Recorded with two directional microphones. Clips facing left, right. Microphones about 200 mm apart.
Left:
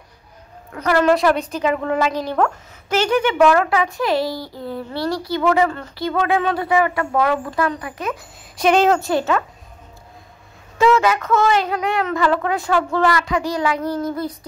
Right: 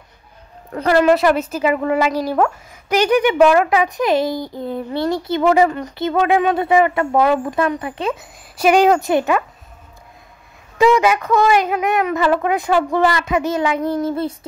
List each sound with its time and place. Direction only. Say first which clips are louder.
1.0 s speech: right 2 dB; 5° right (ahead or behind); by 8.3 s 25° right (ahead or behind)
8.5 s speech: right 2 dB; 10° right (ahead or behind)
10.9 s speech: right 1 dB; 15° right (ahead or behind)